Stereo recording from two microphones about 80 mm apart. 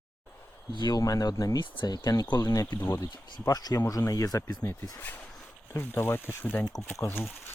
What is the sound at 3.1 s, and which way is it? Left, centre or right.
Speech, left.